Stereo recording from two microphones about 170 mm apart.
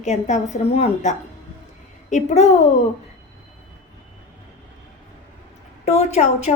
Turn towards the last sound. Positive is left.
turn(degrees=40)  # may be behind; listen again after turning